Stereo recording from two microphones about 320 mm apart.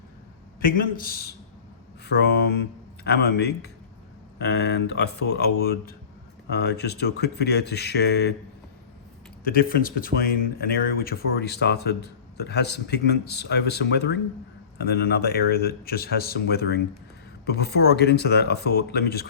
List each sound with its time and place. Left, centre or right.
0.6 s speech: left
9.4 s speech: left